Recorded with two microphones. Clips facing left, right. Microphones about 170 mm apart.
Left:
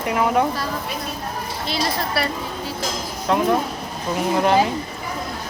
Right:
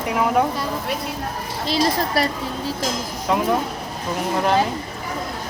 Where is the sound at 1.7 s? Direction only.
40° right (ahead or behind).